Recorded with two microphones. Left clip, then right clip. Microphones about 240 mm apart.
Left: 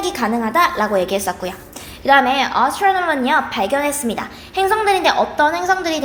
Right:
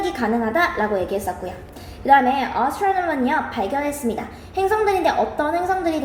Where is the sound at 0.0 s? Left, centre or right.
Left.